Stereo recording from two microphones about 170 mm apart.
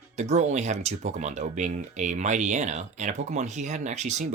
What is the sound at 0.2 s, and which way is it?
Speech, 40° right (ahead or behind).